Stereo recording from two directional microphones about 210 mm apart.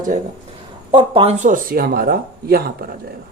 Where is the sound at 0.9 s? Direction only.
25° right (ahead or behind).